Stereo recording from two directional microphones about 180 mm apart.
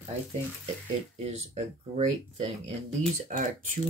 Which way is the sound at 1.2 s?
35° right (ahead or behind).